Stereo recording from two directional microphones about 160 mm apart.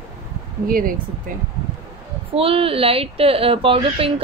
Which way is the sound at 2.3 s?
35° right (ahead or behind).